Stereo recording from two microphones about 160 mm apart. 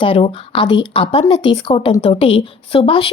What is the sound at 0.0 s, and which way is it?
Speech, 35° left (ahead or behind).